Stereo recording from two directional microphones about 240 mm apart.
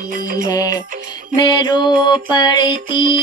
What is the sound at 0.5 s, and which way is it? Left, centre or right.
Music, centre.